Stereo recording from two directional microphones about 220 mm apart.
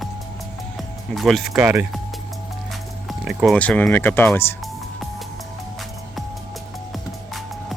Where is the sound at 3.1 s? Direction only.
Centre (ahead or behind).